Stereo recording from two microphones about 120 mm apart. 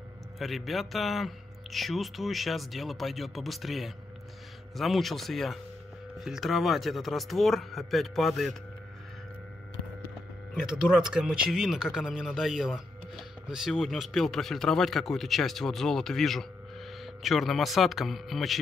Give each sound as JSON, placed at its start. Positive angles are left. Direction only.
{"t": 0.4, "sound": "speech", "side_deg": 0}
{"t": 10.5, "sound": "speech", "side_deg": -5}